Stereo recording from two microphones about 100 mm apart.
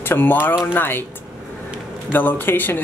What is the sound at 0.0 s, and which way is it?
Speech, 20° left (ahead or behind).